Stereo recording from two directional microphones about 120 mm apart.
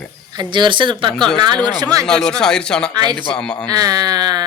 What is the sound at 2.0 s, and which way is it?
Speech, 5° left (ahead or behind).